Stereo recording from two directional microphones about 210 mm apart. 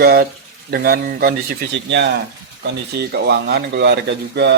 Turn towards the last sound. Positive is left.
turn(degrees=-55)  # may be behind; listen again after turning